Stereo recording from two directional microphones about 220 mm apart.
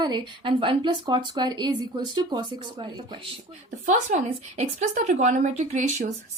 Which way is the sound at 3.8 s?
35° right (ahead or behind).